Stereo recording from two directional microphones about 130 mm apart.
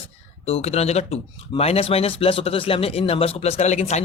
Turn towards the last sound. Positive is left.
turn(degrees=60)  # may be behind; listen again after turning